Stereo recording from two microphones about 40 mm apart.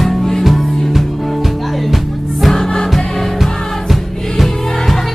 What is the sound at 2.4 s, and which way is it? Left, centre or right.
Music, centre.